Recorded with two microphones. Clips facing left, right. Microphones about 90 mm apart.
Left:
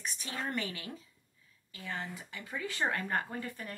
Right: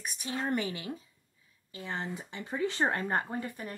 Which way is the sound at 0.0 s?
15° right (ahead or behind).